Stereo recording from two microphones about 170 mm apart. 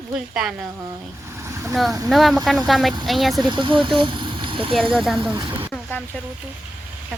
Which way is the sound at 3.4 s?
25° right (ahead or behind).